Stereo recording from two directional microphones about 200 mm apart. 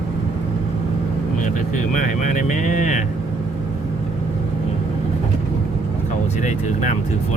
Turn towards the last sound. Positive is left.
turn(degrees=35)  # may be behind; listen again after turning